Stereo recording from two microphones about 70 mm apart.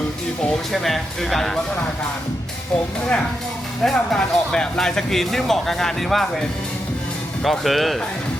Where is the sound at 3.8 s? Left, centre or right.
Centre.